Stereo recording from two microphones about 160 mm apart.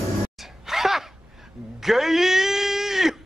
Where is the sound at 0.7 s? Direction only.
Centre (ahead or behind).